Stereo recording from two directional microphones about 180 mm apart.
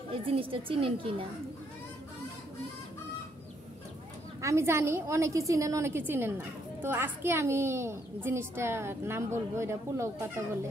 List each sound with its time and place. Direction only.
0.1 s a woman's voice: 30° right (ahead or behind)
4.4 s a woman's voice: 15° right (ahead or behind)